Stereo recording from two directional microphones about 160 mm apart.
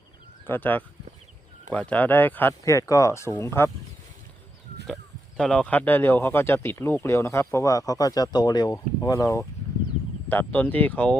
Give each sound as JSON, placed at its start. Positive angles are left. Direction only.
{"t": 0.4, "sound": "speech", "side_deg": 10}
{"t": 5.4, "sound": "speech", "side_deg": 5}